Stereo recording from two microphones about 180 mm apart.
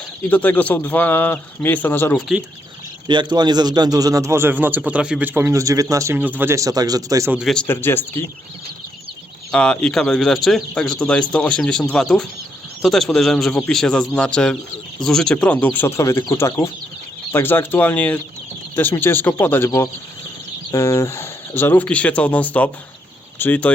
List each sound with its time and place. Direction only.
0.3 s speech: 10° left (ahead or behind)
3.1 s speech: 25° right (ahead or behind)
7.3 s speech: centre (ahead or behind)
9.5 s a man's voice: 5° left (ahead or behind)